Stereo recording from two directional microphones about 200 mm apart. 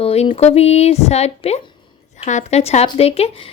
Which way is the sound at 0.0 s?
30° left (ahead or behind).